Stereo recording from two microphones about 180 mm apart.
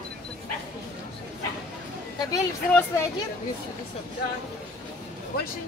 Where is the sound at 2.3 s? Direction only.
15° left (ahead or behind).